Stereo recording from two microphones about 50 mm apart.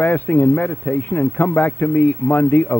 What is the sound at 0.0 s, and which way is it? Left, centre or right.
A man's voice, left.